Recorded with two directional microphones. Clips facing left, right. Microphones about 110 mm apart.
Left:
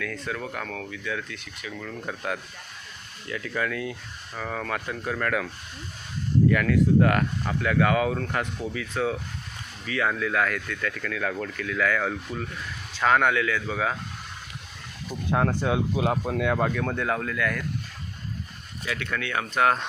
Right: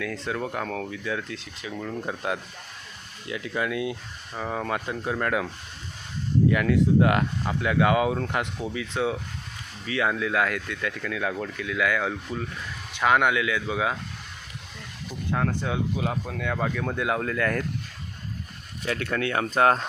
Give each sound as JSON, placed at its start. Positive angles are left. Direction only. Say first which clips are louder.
{"t": 0.0, "sound": "speech", "louder": "right 2 dB", "side_deg": -25}
{"t": 6.5, "sound": "speech", "louder": "even", "side_deg": -20}
{"t": 15.3, "sound": "speech", "louder": "left 3 dB", "side_deg": 15}
{"t": 16.8, "sound": "speech", "louder": "even", "side_deg": -10}
{"t": 17.2, "sound": "speech", "louder": "right 2 dB", "side_deg": -30}
{"t": 18.9, "sound": "speech", "louder": "right 4 dB", "side_deg": -35}